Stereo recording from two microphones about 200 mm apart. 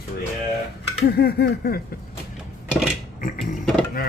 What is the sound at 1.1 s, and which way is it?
Speech, 50° left (ahead or behind).